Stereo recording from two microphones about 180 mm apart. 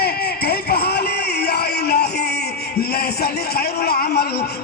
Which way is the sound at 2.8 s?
60° left (ahead or behind).